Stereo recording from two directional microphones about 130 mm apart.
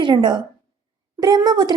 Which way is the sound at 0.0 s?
35° right (ahead or behind).